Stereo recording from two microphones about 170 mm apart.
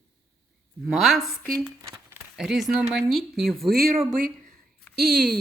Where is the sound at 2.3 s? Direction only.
Centre (ahead or behind).